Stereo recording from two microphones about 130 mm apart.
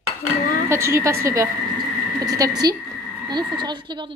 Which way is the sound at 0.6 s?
20° right (ahead or behind).